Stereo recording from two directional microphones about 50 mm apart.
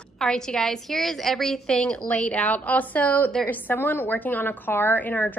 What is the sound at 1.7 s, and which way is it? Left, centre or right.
A woman's voice, left.